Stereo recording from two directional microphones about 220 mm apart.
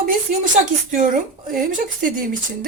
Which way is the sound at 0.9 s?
35° right (ahead or behind).